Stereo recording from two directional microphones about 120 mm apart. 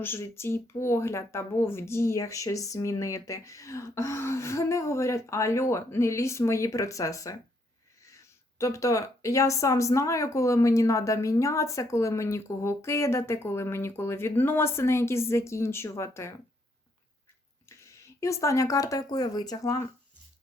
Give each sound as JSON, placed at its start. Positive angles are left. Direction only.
{"t": 0.0, "sound": "speech", "side_deg": 20}
{"t": 17.7, "sound": "speech", "side_deg": 25}